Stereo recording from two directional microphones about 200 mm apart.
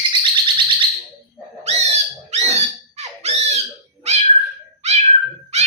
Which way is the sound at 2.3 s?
35° right (ahead or behind).